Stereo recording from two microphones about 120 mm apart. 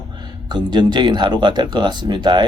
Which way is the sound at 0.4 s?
35° right (ahead or behind).